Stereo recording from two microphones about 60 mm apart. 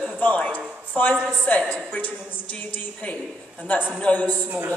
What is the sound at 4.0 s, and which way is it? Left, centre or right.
Speech, left.